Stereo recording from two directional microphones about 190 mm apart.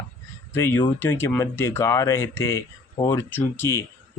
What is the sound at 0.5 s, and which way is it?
Speech, 15° left (ahead or behind).